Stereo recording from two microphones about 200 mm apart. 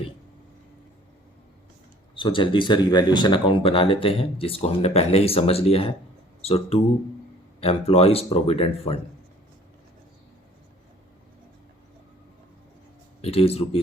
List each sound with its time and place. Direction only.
2.1 s speech: 25° left (ahead or behind)
13.2 s speech: 30° left (ahead or behind)